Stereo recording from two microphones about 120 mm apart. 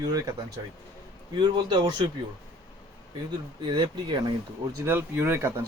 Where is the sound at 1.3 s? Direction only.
40° right (ahead or behind).